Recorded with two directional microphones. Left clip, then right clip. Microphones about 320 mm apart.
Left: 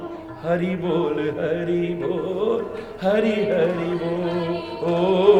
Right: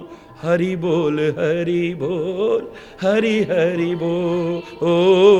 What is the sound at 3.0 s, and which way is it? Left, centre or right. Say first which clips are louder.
Speech: right 3 dB; right.